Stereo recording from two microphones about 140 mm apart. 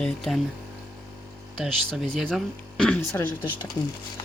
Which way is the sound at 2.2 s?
Centre (ahead or behind).